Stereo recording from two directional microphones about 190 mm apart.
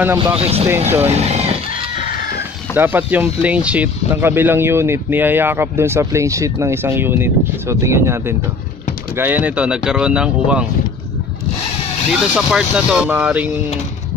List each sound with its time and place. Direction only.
0.4 s speech: 30° right (ahead or behind)
0.7 s speech: 10° right (ahead or behind)
1.1 s speech: 35° right (ahead or behind)
2.7 s speech: 10° right (ahead or behind)
12.1 s speech: centre (ahead or behind)